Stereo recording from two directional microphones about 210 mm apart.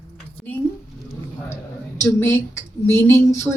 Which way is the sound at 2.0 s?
10° left (ahead or behind).